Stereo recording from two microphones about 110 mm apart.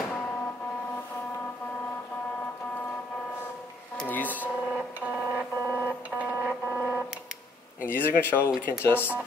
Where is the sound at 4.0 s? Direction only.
15° left (ahead or behind).